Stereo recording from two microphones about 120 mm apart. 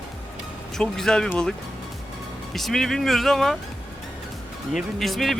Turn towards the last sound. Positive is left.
turn(degrees=0)  # may be behind; listen again after turning